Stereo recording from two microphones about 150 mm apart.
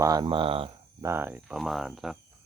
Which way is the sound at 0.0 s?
25° right (ahead or behind).